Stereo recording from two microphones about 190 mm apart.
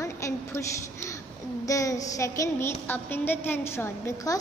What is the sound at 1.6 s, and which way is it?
A woman's voice, 15° left (ahead or behind).